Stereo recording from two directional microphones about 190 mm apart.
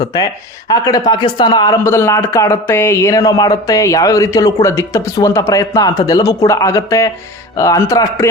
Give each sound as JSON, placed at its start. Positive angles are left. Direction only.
{"t": 0.0, "sound": "a man's voice", "side_deg": 25}